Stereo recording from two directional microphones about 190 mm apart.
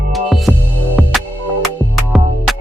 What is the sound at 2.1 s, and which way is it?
Music, centre (ahead or behind).